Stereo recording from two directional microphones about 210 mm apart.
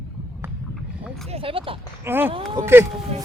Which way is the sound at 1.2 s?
25° right (ahead or behind).